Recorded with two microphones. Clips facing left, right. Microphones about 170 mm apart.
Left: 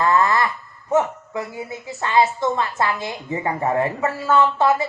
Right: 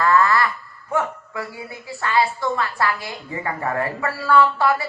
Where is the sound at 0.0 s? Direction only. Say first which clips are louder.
Even; 20° left (ahead or behind).